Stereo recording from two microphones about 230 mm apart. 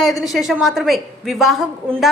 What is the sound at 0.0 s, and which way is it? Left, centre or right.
A woman's voice, centre.